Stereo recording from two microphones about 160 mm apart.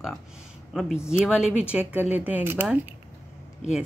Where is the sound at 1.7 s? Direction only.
10° right (ahead or behind).